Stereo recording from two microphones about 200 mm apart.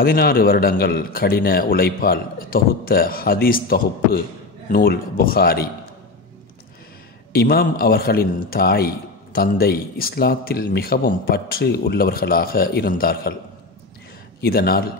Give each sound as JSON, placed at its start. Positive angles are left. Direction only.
{"t": 0.0, "sound": "a man's voice", "side_deg": 50}
{"t": 7.3, "sound": "a man's voice", "side_deg": 50}
{"t": 14.4, "sound": "a man's voice", "side_deg": 50}